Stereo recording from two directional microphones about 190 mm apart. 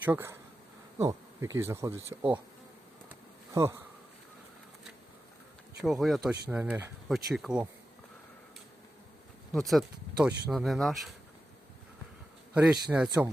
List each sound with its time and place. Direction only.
0.0 s speech: 10° right (ahead or behind)
0.9 s bee: 15° right (ahead or behind)
1.5 s speech: 15° right (ahead or behind)
3.5 s speech: 15° right (ahead or behind)
5.8 s speech: centre (ahead or behind)
6.5 s speech: 10° right (ahead or behind)
9.5 s speech: centre (ahead or behind)
12.9 s speech: 5° right (ahead or behind)